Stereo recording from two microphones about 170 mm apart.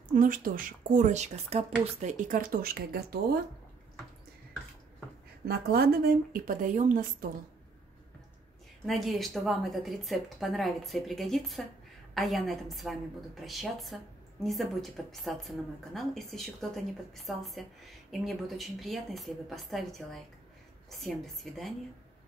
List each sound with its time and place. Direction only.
0.1 s speech: 55° right (ahead or behind)
5.4 s speech: 65° right (ahead or behind); by 7.2 s 50° right (ahead or behind)
8.8 s a woman's voice: centre (ahead or behind)